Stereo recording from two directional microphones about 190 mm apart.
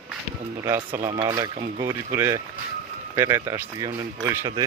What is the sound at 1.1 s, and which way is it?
Speech, 20° right (ahead or behind).